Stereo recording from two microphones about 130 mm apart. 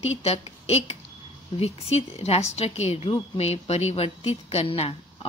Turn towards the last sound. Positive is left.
turn(degrees=50)  # may be behind; listen again after turning